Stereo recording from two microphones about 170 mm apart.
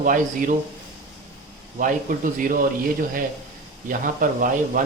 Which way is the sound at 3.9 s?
55° right (ahead or behind).